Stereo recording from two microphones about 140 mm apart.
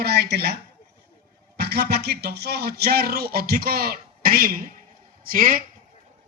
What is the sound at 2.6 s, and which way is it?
Speech, 90° right.